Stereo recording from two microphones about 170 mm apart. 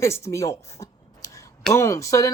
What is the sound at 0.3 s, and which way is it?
Speech, 20° left (ahead or behind).